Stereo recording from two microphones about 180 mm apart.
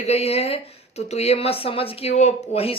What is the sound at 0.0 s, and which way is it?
Speech, 35° left (ahead or behind).